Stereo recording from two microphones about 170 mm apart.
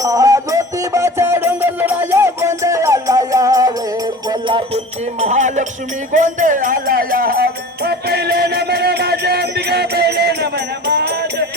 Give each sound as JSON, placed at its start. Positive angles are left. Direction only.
{"t": 0.0, "sound": "music", "side_deg": -20}
{"t": 5.2, "sound": "music", "side_deg": -45}